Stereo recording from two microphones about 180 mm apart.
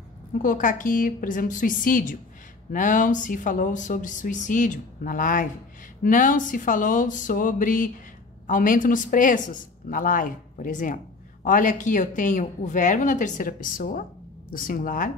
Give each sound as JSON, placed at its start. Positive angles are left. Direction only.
{"t": 0.4, "sound": "speech", "side_deg": 45}